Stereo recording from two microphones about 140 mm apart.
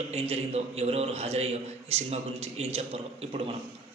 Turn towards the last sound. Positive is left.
turn(degrees=-45)  # may be behind; listen again after turning